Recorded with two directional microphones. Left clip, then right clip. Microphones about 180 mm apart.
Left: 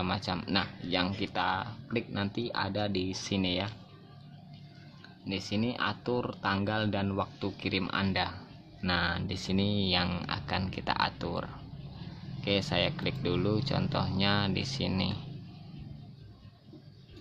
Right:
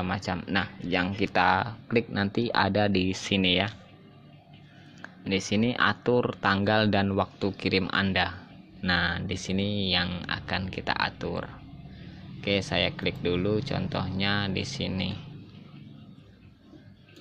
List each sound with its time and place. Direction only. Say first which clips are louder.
0.1 s speech: right 2 dB; 10° right (ahead or behind)
3.3 s speech: right 8 dB; 10° right (ahead or behind)
5.3 s speech: right 7 dB; 20° right (ahead or behind); by 15.2 s centre (ahead or behind)